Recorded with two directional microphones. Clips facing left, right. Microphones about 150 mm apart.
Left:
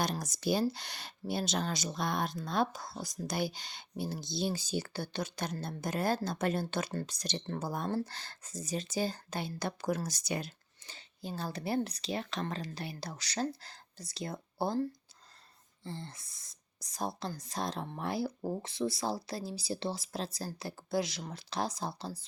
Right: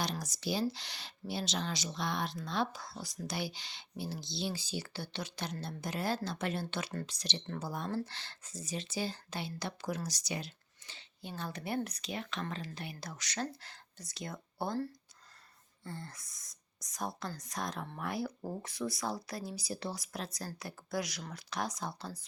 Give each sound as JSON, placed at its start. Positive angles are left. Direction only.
{"t": 0.0, "sound": "speech", "side_deg": 50}
{"t": 15.8, "sound": "speech", "side_deg": 25}